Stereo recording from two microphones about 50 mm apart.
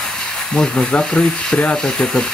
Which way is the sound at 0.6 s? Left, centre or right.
Centre.